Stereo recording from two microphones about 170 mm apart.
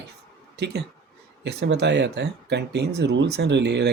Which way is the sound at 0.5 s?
80° right.